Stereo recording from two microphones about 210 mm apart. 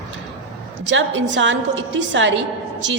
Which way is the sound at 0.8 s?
60° right (ahead or behind).